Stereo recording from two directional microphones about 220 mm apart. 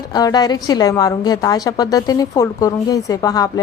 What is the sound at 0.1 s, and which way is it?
A woman's voice, 15° left (ahead or behind).